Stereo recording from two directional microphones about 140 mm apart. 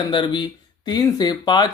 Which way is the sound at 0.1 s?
35° left (ahead or behind).